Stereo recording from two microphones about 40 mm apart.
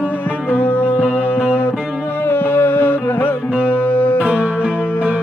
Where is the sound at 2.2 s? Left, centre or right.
Left.